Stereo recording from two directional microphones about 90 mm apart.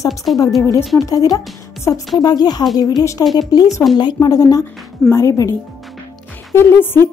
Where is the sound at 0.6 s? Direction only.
40° left (ahead or behind).